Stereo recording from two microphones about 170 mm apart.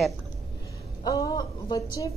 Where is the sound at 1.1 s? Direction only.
25° left (ahead or behind).